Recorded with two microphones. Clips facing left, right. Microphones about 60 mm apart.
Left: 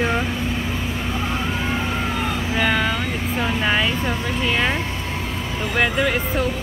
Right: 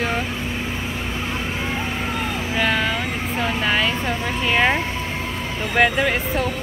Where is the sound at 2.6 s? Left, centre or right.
Centre.